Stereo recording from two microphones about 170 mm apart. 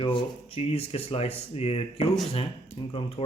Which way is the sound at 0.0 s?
35° left (ahead or behind).